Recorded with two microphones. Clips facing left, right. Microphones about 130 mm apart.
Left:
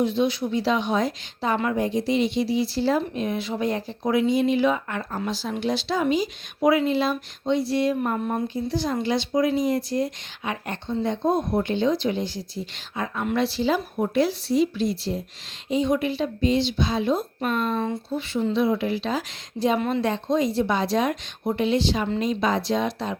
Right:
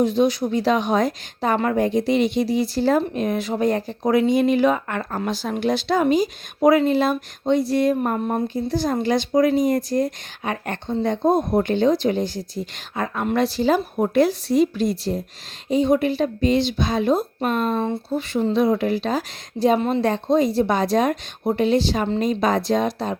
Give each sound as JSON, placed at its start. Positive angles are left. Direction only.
{"t": 0.0, "sound": "a woman's voice", "side_deg": -40}